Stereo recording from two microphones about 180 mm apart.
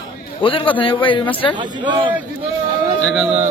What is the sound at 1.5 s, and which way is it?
Speech, 25° right (ahead or behind).